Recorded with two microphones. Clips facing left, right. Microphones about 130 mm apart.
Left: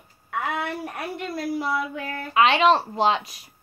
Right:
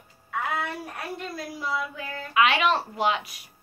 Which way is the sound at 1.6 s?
60° left (ahead or behind).